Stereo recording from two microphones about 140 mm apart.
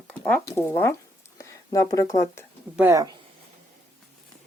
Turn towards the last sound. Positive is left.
turn(degrees=-25)  # may be behind; listen again after turning